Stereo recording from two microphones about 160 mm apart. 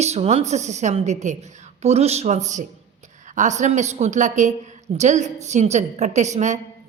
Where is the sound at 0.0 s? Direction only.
45° right (ahead or behind).